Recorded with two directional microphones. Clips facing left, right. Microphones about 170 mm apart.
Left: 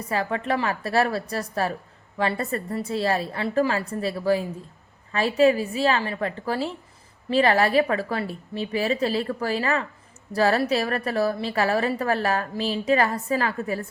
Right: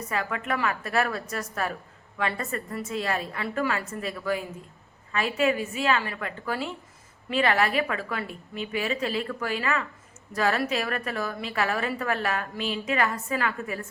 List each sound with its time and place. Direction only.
0.1 s a woman's voice: 30° left (ahead or behind)